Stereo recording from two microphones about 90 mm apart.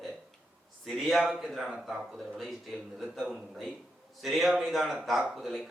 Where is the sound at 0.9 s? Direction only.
Centre (ahead or behind).